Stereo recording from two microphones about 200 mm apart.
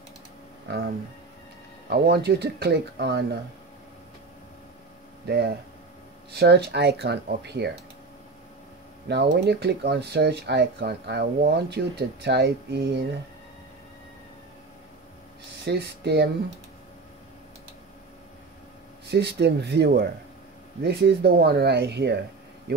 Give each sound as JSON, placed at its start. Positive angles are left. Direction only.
{"t": 0.7, "sound": "a sound", "side_deg": -50}
{"t": 1.9, "sound": "speech", "side_deg": -55}
{"t": 5.2, "sound": "speech", "side_deg": -55}
{"t": 9.0, "sound": "speech", "side_deg": -55}
{"t": 15.6, "sound": "speech", "side_deg": -55}
{"t": 19.0, "sound": "speech", "side_deg": -55}